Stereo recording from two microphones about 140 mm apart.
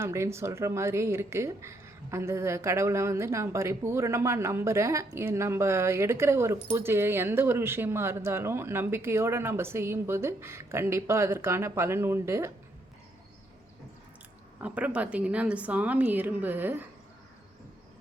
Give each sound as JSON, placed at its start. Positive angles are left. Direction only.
{"t": 0.0, "sound": "a woman's voice", "side_deg": -20}
{"t": 14.6, "sound": "speech", "side_deg": -10}